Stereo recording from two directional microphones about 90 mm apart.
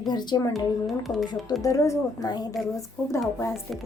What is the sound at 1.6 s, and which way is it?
Speech, 35° left (ahead or behind).